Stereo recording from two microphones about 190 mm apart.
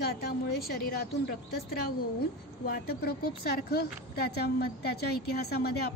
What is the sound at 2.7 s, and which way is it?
A woman's voice, 55° left (ahead or behind).